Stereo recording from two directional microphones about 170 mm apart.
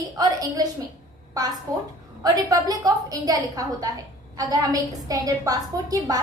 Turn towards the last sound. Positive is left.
turn(degrees=-20)  # may be behind; listen again after turning